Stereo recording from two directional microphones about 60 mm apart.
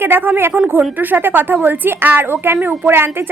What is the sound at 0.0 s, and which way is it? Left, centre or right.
A woman's voice, right.